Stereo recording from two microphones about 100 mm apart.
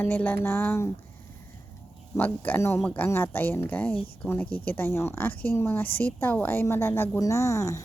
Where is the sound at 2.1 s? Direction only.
20° left (ahead or behind).